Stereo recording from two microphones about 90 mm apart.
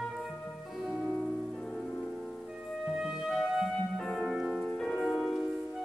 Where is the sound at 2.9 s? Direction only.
5° right (ahead or behind).